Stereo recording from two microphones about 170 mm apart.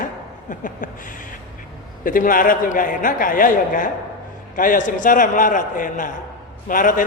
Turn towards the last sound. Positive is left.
turn(degrees=50)  # may be behind; listen again after turning